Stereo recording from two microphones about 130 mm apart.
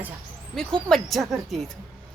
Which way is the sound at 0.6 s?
5° left (ahead or behind).